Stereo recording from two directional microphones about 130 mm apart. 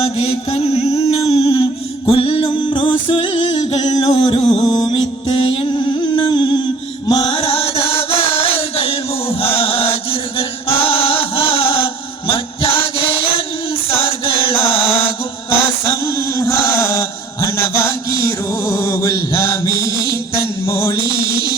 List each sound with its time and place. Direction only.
0.0 s mantra: 50° left (ahead or behind)
2.0 s music: 45° left (ahead or behind)
3.8 s music: 30° left (ahead or behind)
4.1 s music: 45° left (ahead or behind)
4.6 s music: 35° left (ahead or behind)
9.4 s chant: 45° left (ahead or behind)
12.3 s music: 45° left (ahead or behind)
13.9 s chant: 45° left (ahead or behind)
16.1 s chant: 20° left (ahead or behind)
17.7 s a sound: 20° left (ahead or behind)
20.7 s music: 20° left (ahead or behind)